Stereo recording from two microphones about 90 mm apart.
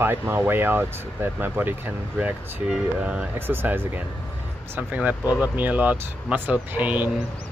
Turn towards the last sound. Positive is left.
turn(degrees=-20)  # may be behind; listen again after turning